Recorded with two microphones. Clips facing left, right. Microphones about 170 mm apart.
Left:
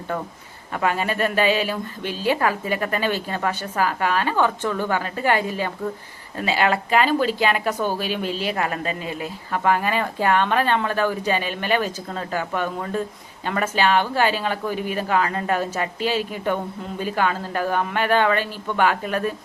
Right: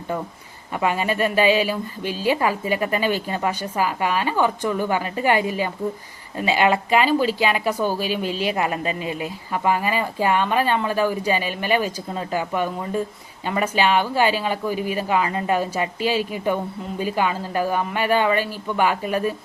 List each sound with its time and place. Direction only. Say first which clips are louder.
0.7 s speech: right 1 dB; 10° right (ahead or behind)
8.3 s speech: right 2 dB; 40° left (ahead or behind)
8.5 s speech: right 2 dB; 15° right (ahead or behind)
8.8 s speech: right 2 dB; 40° left (ahead or behind)
9.2 s speech: left 1 dB; 10° right (ahead or behind)